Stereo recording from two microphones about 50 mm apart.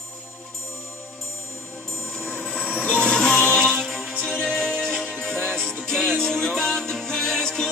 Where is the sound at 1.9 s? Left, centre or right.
Centre.